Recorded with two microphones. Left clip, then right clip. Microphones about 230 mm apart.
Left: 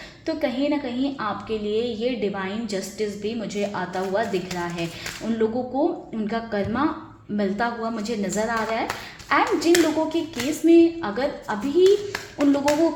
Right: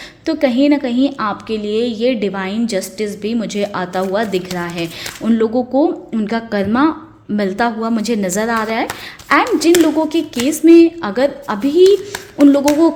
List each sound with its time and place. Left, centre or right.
0.3 s a woman's voice: right